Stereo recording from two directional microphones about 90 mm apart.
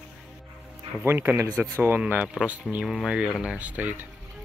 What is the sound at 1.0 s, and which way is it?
Speech, 25° right (ahead or behind).